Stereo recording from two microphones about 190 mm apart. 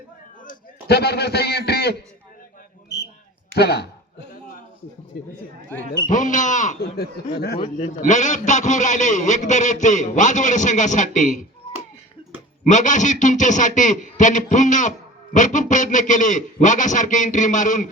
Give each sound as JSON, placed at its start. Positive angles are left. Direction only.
{"t": 0.4, "sound": "a man's voice", "side_deg": 60}
{"t": 3.5, "sound": "a sound", "side_deg": 60}
{"t": 5.1, "sound": "speech", "side_deg": 60}
{"t": 6.1, "sound": "a man's voice", "side_deg": 45}
{"t": 7.0, "sound": "speech", "side_deg": 55}
{"t": 7.6, "sound": "a man's voice", "side_deg": 35}
{"t": 12.6, "sound": "a man's voice", "side_deg": 40}